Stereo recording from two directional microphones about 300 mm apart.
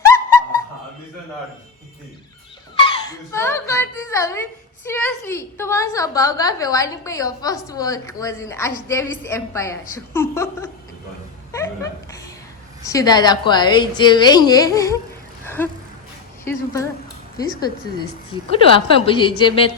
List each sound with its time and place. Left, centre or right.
2.7 s a child's voice: centre
11.5 s a sound: centre
12.8 s a woman's voice: centre
15.4 s vehicle: centre
16.4 s speech: centre
18.5 s a woman's voice: centre